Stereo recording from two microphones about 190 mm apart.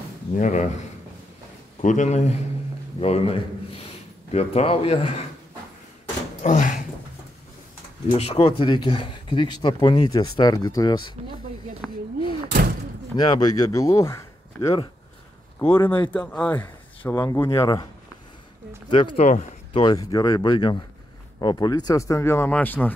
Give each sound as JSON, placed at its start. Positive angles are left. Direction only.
{"t": 0.4, "sound": "a man's voice", "side_deg": 40}
{"t": 1.8, "sound": "a man's voice", "side_deg": 40}
{"t": 6.4, "sound": "speech", "side_deg": 40}
{"t": 8.1, "sound": "speech", "side_deg": 30}
{"t": 11.8, "sound": "a sound", "side_deg": 5}
{"t": 13.1, "sound": "speech", "side_deg": 20}
{"t": 18.9, "sound": "speech", "side_deg": 25}